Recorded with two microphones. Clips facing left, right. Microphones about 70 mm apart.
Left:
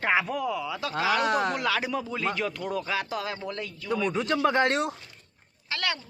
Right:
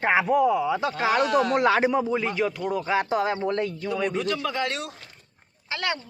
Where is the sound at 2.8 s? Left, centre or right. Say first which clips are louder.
Right 7 dB; right.